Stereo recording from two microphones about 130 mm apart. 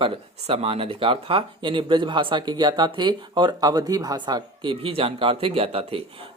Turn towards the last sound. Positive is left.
turn(degrees=-45)  # may be behind; listen again after turning